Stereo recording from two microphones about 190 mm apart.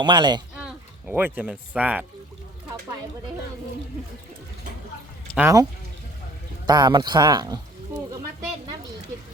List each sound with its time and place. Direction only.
0.0 s speech: 25° right (ahead or behind)
0.5 s speech: 5° right (ahead or behind)
5.4 s speech: 15° right (ahead or behind)
6.7 s speech: 20° right (ahead or behind)